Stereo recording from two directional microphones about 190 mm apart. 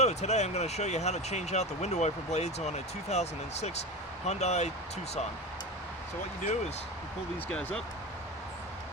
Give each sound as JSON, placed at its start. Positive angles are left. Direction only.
{"t": 0.0, "sound": "speech", "side_deg": 35}